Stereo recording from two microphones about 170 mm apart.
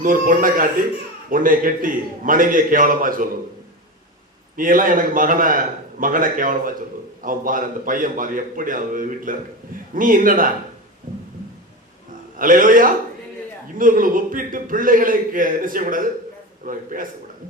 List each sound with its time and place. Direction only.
0.0 s a man's voice: 55° right (ahead or behind)
4.5 s a man's voice: 55° right (ahead or behind)
12.4 s a man's voice: 55° right (ahead or behind)